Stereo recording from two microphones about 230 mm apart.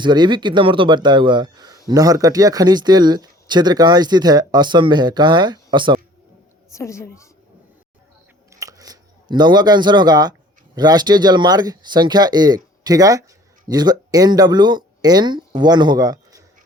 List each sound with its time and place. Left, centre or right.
0.0 s speech: centre
6.7 s a woman's voice: centre
8.5 s a sound: centre
10.8 s speech: centre